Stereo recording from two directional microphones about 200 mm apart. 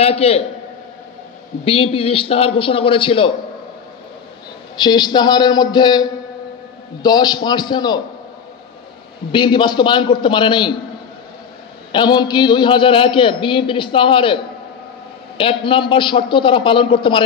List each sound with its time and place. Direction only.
0.0 s a man's voice: 30° left (ahead or behind)
1.6 s a man's voice: 30° left (ahead or behind)
4.7 s a man's voice: 20° left (ahead or behind)
9.3 s a man's voice: 25° left (ahead or behind)
11.9 s a man's voice: 20° left (ahead or behind)